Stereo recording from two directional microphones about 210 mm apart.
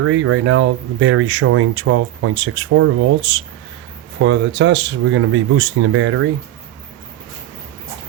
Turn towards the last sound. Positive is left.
turn(degrees=-70)  # may be behind; listen again after turning